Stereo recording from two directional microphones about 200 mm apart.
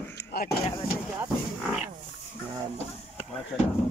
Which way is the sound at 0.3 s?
50° left (ahead or behind).